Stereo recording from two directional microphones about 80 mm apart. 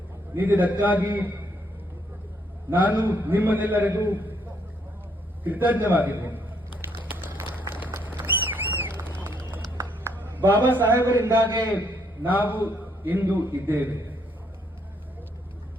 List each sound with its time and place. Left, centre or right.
0.3 s a man's voice: right
2.6 s a man's voice: right
5.4 s a man's voice: right
7.1 s a sound: right
7.7 s run: right
9.7 s a sound: right
10.6 s a man's voice: right